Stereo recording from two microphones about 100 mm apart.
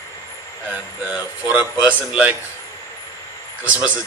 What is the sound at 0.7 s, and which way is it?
Speech, 15° right (ahead or behind).